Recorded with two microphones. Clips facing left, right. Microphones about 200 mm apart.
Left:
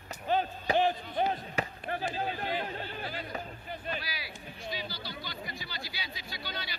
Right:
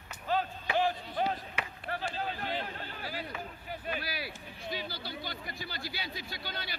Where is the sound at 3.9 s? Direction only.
50° right (ahead or behind).